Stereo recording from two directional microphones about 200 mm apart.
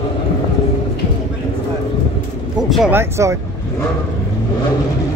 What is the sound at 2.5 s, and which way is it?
Speech, centre (ahead or behind).